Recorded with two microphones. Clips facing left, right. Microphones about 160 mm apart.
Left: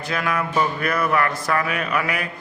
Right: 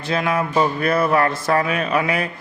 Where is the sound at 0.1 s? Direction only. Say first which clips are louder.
Right 4 dB; 25° right (ahead or behind).